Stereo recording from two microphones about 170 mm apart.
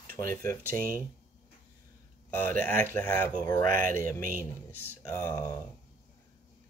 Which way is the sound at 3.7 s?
50° right (ahead or behind).